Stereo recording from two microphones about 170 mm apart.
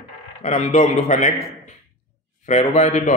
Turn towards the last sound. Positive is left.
turn(degrees=45)  # may be behind; listen again after turning